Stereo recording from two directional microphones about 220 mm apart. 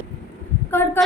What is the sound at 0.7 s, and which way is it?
Speech, 10° left (ahead or behind).